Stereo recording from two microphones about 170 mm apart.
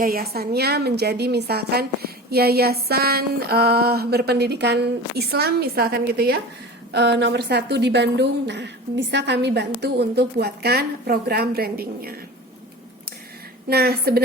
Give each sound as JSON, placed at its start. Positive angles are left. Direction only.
{"t": 0.0, "sound": "a woman's voice", "side_deg": -60}
{"t": 6.9, "sound": "a woman's voice", "side_deg": -80}
{"t": 13.7, "sound": "a woman's voice", "side_deg": -65}